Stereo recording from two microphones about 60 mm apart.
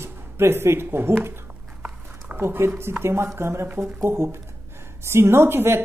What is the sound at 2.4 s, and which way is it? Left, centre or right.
Speech, right.